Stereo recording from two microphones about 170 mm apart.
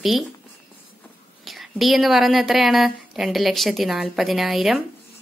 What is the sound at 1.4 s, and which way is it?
A woman's voice, centre (ahead or behind).